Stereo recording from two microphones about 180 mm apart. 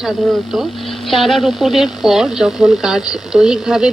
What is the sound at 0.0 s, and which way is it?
Speech, centre (ahead or behind).